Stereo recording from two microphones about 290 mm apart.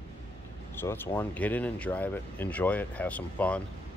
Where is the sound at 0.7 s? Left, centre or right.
Centre.